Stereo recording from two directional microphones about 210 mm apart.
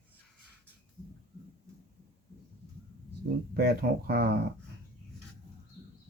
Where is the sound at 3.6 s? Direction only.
50° right (ahead or behind).